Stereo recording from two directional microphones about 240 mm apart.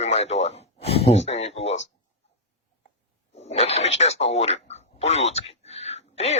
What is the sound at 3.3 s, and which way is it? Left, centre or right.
Speech, left.